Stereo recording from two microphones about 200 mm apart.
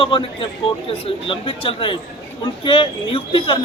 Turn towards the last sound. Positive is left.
turn(degrees=25)  # may be behind; listen again after turning